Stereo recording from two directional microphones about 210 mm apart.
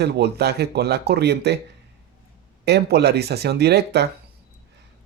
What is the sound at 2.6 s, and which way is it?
Speech, 50° right (ahead or behind).